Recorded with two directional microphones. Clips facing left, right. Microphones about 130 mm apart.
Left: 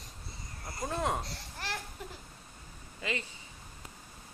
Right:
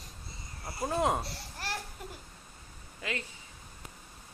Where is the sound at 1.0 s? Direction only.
10° right (ahead or behind).